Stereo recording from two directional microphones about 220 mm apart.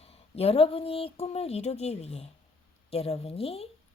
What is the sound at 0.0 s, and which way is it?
A woman's voice, 25° left (ahead or behind).